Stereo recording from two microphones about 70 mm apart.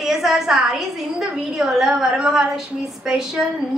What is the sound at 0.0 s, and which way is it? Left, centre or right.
A woman's voice, centre.